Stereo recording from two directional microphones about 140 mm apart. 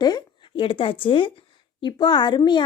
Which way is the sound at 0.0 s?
30° left (ahead or behind).